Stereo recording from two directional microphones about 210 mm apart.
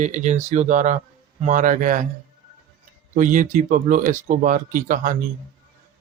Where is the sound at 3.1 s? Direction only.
40° right (ahead or behind).